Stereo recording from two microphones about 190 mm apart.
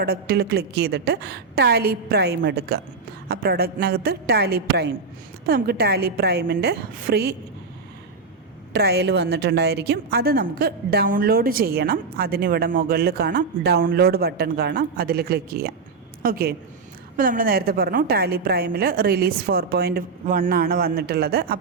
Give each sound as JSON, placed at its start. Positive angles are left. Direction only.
{"t": 0.0, "sound": "a woman's voice", "side_deg": -55}
{"t": 8.7, "sound": "a woman's voice", "side_deg": -60}